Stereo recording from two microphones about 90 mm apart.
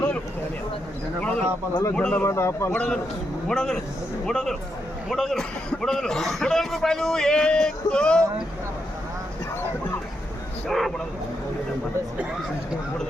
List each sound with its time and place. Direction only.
1.2 s a sound: 10° left (ahead or behind)
2.0 s speech: 15° left (ahead or behind)
2.2 s speech: 30° left (ahead or behind)
2.7 s a man's voice: 15° left (ahead or behind)
10.7 s speech: centre (ahead or behind)